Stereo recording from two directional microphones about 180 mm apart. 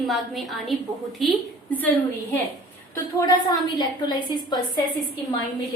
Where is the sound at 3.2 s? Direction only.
20° left (ahead or behind).